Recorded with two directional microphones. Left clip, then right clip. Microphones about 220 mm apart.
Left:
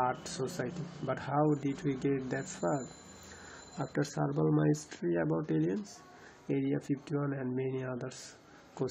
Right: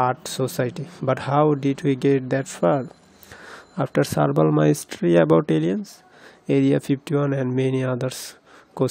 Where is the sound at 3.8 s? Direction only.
50° right (ahead or behind).